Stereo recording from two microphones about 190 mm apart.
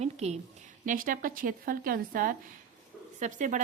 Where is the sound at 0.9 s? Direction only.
45° right (ahead or behind).